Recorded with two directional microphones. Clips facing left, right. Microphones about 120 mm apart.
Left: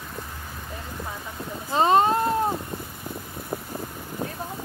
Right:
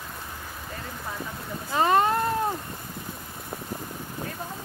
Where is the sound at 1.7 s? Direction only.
25° left (ahead or behind).